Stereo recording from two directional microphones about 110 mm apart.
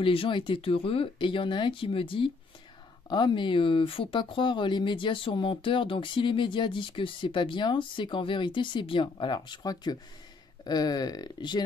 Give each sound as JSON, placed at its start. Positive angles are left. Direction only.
{"t": 0.0, "sound": "speech", "side_deg": 55}